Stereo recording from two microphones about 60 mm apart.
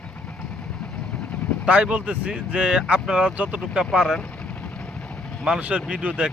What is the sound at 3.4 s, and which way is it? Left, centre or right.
Speech, right.